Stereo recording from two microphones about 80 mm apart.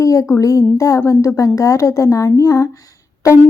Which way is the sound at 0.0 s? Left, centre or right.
Left.